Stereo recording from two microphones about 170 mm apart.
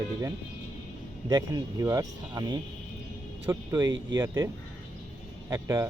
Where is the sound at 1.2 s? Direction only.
25° right (ahead or behind).